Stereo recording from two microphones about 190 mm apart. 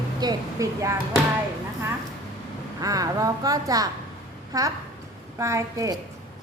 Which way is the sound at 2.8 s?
20° right (ahead or behind).